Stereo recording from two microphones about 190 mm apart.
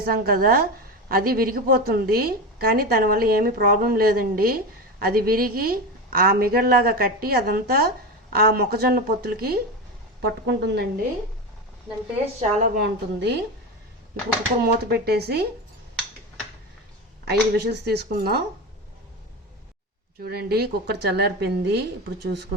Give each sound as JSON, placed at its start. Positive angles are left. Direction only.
{"t": 0.0, "sound": "a woman's voice", "side_deg": -50}
{"t": 10.2, "sound": "a woman's voice", "side_deg": -65}
{"t": 12.4, "sound": "a woman's voice", "side_deg": -45}
{"t": 12.8, "sound": "a woman's voice", "side_deg": -65}
{"t": 14.6, "sound": "a woman's voice", "side_deg": -55}
{"t": 17.2, "sound": "a woman's voice", "side_deg": -60}
{"t": 20.2, "sound": "a woman's voice", "side_deg": -55}